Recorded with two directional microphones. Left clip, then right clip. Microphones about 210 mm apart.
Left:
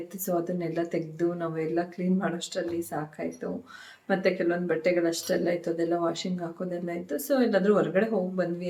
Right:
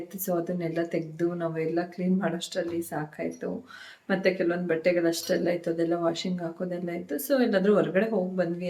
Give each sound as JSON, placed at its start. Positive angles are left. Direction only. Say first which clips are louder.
{"t": 0.3, "sound": "speech", "louder": "even", "side_deg": -10}